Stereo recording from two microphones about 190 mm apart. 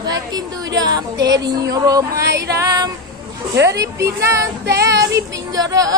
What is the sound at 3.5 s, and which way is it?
Child singing, 65° right (ahead or behind).